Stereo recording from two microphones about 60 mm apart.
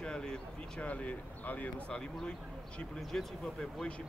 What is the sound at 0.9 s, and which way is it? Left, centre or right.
Speech, left.